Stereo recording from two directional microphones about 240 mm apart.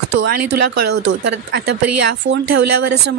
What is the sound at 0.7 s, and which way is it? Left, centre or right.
Speech, right.